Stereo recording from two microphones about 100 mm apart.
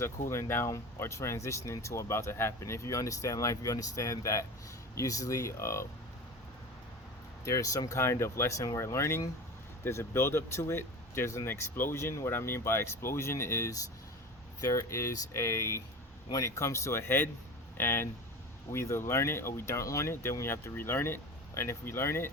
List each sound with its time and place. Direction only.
0.0 s speech: 25° left (ahead or behind)
7.4 s speech: 35° left (ahead or behind)